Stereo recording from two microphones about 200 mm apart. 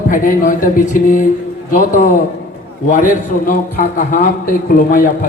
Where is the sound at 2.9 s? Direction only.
40° left (ahead or behind).